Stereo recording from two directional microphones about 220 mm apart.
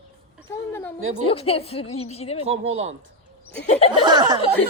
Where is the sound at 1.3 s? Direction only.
25° left (ahead or behind).